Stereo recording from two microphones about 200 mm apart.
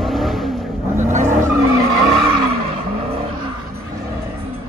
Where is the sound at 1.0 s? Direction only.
40° right (ahead or behind).